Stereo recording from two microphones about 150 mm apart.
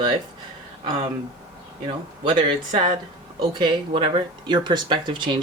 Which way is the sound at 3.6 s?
35° right (ahead or behind).